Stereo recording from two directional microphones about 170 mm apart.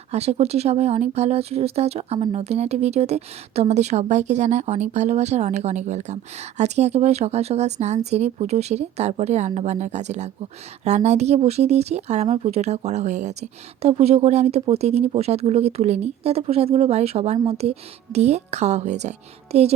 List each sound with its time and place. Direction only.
0.1 s speech: 40° right (ahead or behind)